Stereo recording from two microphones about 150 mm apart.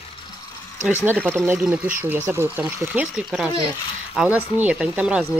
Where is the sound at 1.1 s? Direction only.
15° right (ahead or behind).